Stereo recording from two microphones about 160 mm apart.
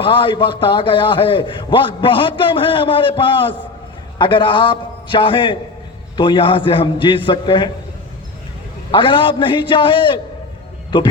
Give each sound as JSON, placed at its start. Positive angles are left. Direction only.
{"t": 0.0, "sound": "a man's voice", "side_deg": 30}
{"t": 8.9, "sound": "a man's voice", "side_deg": 30}